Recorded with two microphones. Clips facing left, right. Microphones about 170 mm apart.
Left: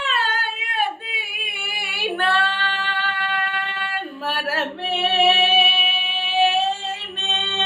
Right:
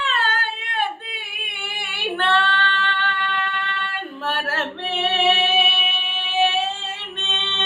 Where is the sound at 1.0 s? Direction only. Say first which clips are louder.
Left 2 dB; 10° left (ahead or behind).